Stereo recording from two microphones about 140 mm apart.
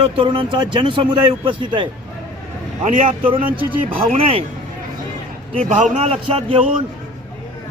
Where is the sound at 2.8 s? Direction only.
70° right (ahead or behind).